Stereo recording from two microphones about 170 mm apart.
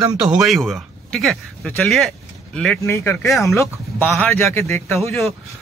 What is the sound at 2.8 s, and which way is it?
A man's voice, 15° left (ahead or behind).